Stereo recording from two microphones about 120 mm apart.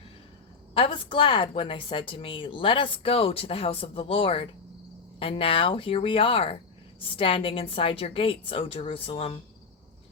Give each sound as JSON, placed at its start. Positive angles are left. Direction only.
{"t": 0.7, "sound": "a woman's voice", "side_deg": 45}